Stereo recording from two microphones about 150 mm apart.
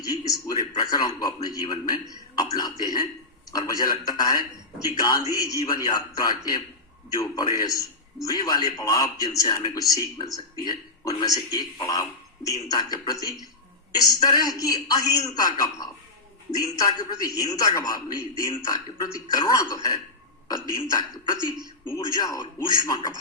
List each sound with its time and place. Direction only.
0.0 s a sound: 25° left (ahead or behind)
0.8 s a man's voice: 25° left (ahead or behind)
2.4 s throat clearing: 25° left (ahead or behind)
2.8 s a sound: 25° left (ahead or behind)
3.5 s a man's voice: 25° left (ahead or behind)
7.6 s a man's voice: 25° left (ahead or behind)